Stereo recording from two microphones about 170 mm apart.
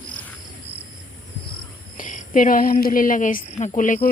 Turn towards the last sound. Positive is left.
turn(degrees=50)  # may be behind; listen again after turning